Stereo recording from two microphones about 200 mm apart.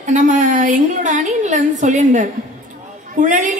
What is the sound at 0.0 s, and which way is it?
A woman's voice, 40° right (ahead or behind).